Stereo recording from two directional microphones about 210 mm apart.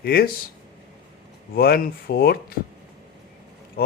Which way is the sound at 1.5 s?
45° left (ahead or behind).